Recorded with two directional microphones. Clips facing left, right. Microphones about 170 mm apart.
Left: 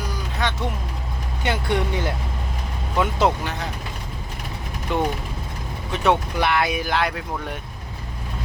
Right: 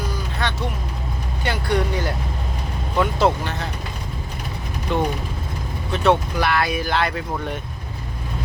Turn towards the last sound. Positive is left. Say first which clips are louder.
# right 1 dB
turn(degrees=10)  # may be behind; listen again after turning